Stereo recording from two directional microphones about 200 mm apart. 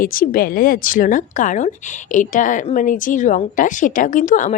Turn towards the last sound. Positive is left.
turn(degrees=40)  # may be behind; listen again after turning